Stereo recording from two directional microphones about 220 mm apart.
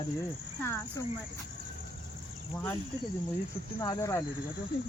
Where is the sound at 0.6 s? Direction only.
10° left (ahead or behind).